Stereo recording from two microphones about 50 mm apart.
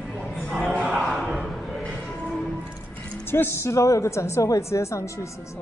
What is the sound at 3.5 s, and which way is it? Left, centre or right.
Speech, left.